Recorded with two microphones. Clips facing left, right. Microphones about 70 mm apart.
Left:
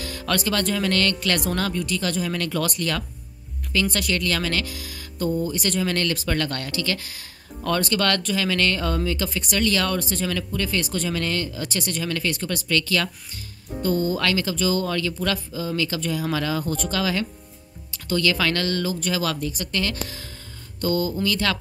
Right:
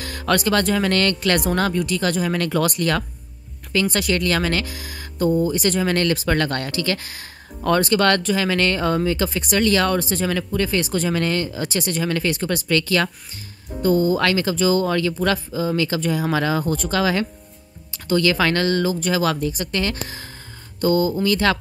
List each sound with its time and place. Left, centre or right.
0.0 s speech: right